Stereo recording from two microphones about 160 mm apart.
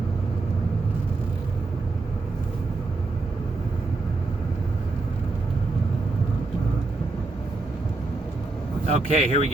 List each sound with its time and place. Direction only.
8.9 s speech: 45° right (ahead or behind)